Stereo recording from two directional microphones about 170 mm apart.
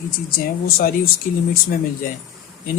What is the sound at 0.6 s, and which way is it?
Speech, 60° left (ahead or behind).